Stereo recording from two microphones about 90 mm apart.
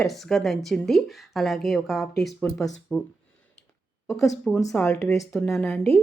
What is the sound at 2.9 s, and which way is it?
Speech, 15° left (ahead or behind).